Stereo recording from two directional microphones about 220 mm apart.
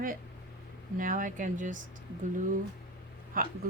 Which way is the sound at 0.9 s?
35° right (ahead or behind).